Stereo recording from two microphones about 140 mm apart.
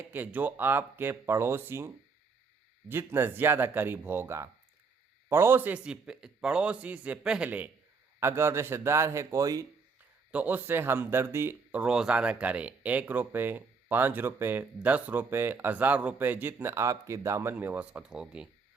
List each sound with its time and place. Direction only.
0.1 s speech: 15° right (ahead or behind)
2.9 s a man's voice: 15° right (ahead or behind)
10.3 s speech: 10° right (ahead or behind)